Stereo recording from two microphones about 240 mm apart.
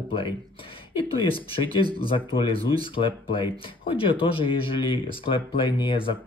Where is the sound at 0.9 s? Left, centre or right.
Left.